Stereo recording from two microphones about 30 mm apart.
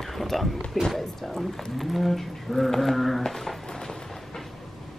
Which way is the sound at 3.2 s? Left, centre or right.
Centre.